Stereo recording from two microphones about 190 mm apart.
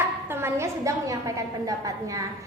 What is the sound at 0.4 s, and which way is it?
A woman's voice, 15° right (ahead or behind).